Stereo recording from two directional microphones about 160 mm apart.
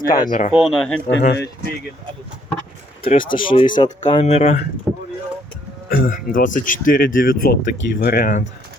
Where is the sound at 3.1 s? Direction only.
30° left (ahead or behind).